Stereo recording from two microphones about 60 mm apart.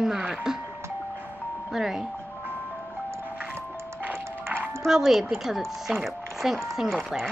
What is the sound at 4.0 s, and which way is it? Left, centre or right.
Music, right.